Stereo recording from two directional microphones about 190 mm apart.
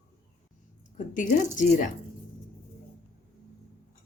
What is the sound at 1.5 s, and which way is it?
Speech, 40° left (ahead or behind).